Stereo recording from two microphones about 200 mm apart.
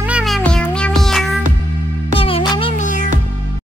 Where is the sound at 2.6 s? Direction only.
40° left (ahead or behind).